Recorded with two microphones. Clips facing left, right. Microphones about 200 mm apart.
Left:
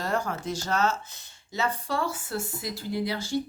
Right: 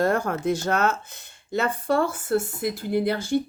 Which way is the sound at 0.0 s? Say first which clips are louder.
Right 7 dB; 55° right (ahead or behind).